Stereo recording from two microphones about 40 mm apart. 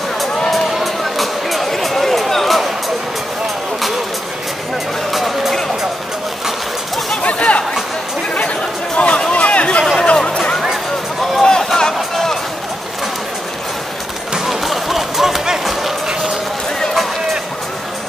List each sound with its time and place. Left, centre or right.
0.5 s a sound: centre
5.1 s music: centre
7.2 s chatter: left
8.9 s a sound: left
11.4 s run: centre
14.3 s music: centre